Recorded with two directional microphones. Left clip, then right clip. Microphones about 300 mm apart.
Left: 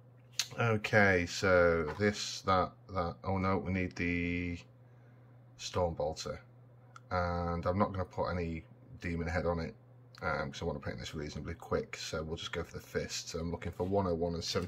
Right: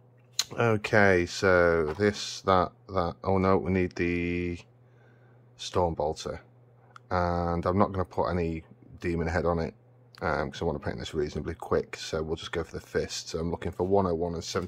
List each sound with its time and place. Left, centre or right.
0.4 s speech: centre